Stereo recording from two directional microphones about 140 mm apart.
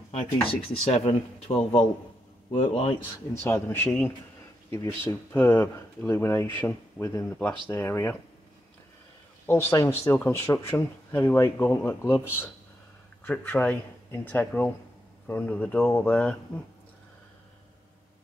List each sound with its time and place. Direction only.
0.1 s speech: 50° left (ahead or behind)
3.4 s speech: 15° left (ahead or behind)
9.5 s speech: 20° left (ahead or behind)